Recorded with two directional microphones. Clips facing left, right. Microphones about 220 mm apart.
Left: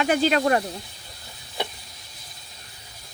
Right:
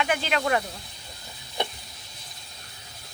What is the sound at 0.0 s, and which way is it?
Speech, 40° left (ahead or behind).